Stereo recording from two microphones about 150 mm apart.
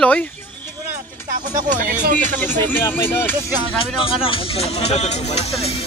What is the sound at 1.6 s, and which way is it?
Speech, 60° right (ahead or behind).